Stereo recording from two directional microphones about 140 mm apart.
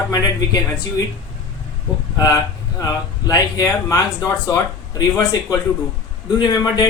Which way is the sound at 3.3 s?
25° left (ahead or behind).